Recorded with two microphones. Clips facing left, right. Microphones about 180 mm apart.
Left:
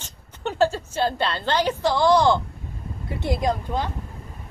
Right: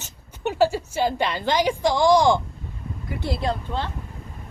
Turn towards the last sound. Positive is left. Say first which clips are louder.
# left 2 dB
turn(degrees=15)  # may be behind; listen again after turning